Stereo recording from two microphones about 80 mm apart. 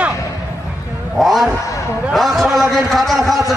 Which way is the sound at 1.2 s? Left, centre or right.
Centre.